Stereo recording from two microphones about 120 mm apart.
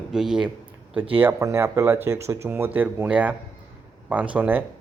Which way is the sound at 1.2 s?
20° right (ahead or behind).